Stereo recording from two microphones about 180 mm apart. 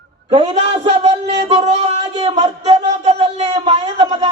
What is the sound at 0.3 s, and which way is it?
A man's voice, 30° right (ahead or behind).